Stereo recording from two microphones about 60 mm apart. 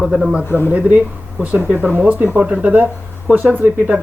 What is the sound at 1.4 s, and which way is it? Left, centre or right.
Speech, right.